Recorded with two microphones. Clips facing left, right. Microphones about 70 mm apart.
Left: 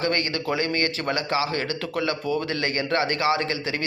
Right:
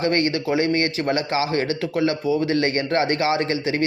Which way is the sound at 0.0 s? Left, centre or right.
Right.